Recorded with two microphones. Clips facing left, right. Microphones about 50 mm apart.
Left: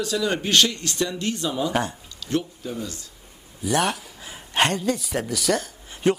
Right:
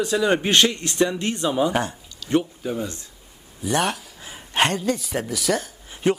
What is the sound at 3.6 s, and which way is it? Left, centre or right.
Speech, centre.